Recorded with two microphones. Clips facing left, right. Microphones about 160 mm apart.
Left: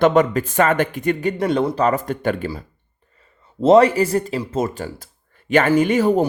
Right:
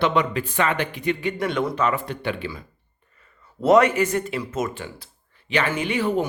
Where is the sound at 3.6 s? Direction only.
30° left (ahead or behind).